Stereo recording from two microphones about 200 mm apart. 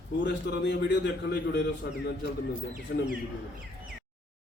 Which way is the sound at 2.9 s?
65° left (ahead or behind).